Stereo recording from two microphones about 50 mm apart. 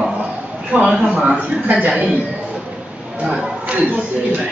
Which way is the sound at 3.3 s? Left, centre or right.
Right.